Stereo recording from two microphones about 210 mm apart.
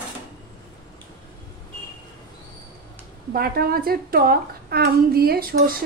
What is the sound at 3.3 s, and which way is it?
Speech, 45° right (ahead or behind).